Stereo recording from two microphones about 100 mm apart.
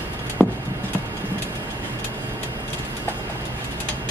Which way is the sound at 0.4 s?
25° left (ahead or behind).